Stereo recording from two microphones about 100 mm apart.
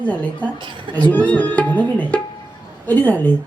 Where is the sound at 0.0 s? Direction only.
15° left (ahead or behind).